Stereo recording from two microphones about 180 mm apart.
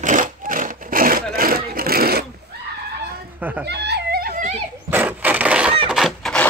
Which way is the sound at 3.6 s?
70° right (ahead or behind).